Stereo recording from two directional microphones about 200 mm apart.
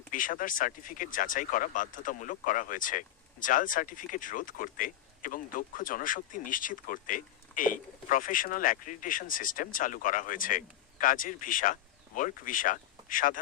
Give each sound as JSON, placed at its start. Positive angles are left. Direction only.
{"t": 0.1, "sound": "speech", "side_deg": 40}